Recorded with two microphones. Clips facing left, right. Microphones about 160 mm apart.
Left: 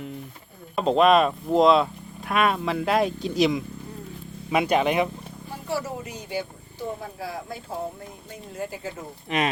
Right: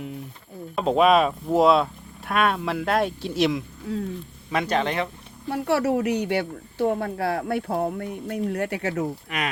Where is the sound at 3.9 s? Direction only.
90° right.